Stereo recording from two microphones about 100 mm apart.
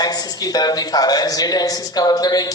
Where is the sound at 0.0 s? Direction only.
40° left (ahead or behind).